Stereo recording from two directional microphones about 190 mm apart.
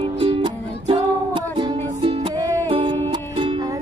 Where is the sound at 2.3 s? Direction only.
25° right (ahead or behind).